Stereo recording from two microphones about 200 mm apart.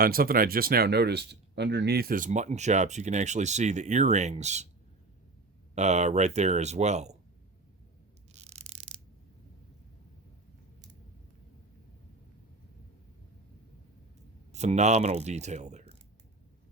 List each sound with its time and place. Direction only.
0.0 s speech: 45° right (ahead or behind)
5.7 s speech: 35° right (ahead or behind)
14.5 s speech: 35° right (ahead or behind)